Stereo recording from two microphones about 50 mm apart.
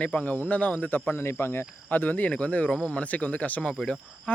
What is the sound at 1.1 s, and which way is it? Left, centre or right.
Speech, left.